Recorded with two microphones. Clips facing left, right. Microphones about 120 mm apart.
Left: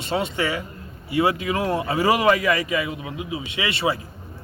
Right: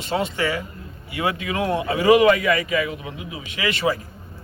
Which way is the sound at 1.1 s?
30° left (ahead or behind).